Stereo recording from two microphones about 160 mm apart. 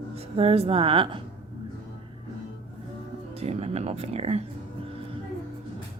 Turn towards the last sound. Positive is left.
turn(degrees=-40)  # may be behind; listen again after turning